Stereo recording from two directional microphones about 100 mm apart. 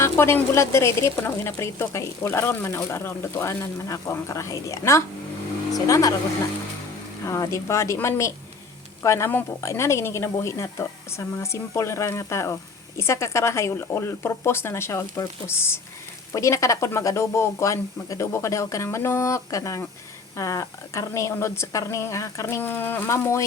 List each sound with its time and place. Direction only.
0.0 s speech: 25° left (ahead or behind)
7.3 s speech: 30° left (ahead or behind)
7.9 s speech: 20° left (ahead or behind)